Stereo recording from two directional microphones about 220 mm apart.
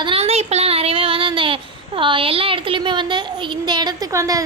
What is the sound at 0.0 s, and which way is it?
A woman's voice, 25° right (ahead or behind).